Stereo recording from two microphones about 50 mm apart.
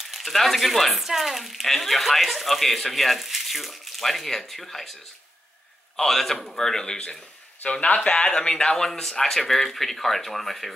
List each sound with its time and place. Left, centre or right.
0.0 s speech: centre
5.9 s speech: centre